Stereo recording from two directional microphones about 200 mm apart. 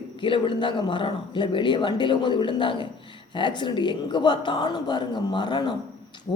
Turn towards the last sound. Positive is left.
turn(degrees=20)  # may be behind; listen again after turning